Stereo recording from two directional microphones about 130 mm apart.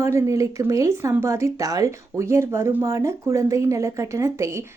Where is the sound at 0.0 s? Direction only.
20° right (ahead or behind).